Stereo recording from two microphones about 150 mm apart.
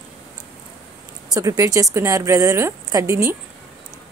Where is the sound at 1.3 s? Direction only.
25° right (ahead or behind).